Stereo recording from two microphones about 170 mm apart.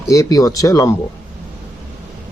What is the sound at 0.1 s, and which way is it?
Speech, 20° left (ahead or behind).